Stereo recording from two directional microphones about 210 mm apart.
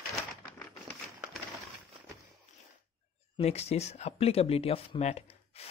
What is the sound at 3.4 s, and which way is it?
Speech, 30° left (ahead or behind).